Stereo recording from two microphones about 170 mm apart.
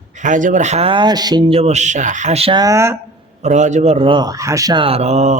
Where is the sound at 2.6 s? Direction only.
20° right (ahead or behind).